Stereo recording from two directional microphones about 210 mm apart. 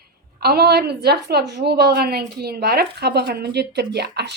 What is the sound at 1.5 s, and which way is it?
Speech, 50° right (ahead or behind).